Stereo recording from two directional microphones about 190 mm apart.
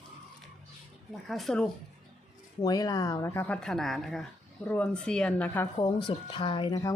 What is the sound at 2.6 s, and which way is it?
A woman's voice, 20° left (ahead or behind).